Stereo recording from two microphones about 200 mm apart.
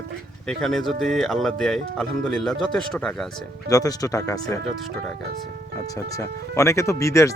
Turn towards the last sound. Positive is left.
turn(degrees=15)  # may be behind; listen again after turning